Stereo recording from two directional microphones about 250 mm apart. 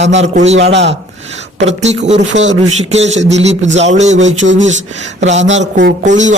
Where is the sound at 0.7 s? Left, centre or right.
Right.